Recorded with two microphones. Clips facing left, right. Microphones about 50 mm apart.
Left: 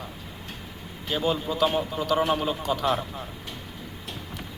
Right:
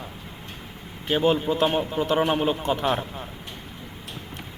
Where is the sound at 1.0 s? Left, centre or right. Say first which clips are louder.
Right 5 dB; right.